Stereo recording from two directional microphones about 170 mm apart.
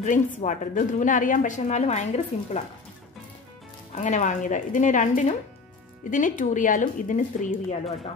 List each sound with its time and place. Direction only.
0.0 s speech: 45° left (ahead or behind)
3.9 s speech: 45° left (ahead or behind)